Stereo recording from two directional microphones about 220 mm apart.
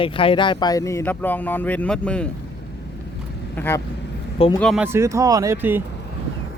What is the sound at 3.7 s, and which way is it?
Speech, 10° left (ahead or behind).